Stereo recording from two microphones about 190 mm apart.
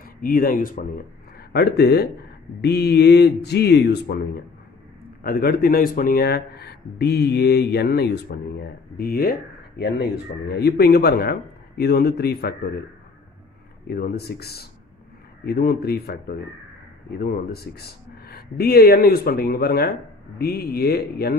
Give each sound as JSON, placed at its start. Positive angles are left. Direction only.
{"t": 0.0, "sound": "speech", "side_deg": 50}
{"t": 1.5, "sound": "speech", "side_deg": 60}
{"t": 5.2, "sound": "speech", "side_deg": 50}
{"t": 13.8, "sound": "speech", "side_deg": 55}